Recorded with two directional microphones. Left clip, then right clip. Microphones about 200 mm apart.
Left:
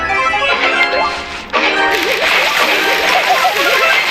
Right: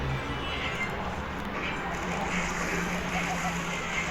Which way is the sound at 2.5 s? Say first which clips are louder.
Left 19 dB; 20° left (ahead or behind).